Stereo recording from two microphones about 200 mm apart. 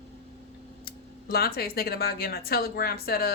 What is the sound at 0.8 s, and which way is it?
A woman's voice, 50° left (ahead or behind).